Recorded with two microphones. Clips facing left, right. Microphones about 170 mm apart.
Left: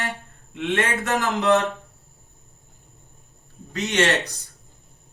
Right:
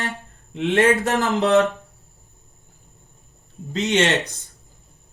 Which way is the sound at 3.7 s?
20° right (ahead or behind).